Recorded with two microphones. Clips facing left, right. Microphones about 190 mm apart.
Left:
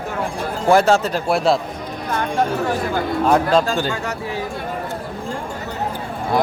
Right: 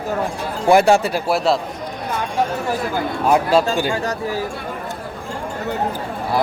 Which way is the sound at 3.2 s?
10° right (ahead or behind).